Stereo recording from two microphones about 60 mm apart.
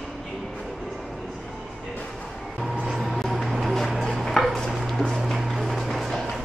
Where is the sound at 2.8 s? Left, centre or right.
Centre.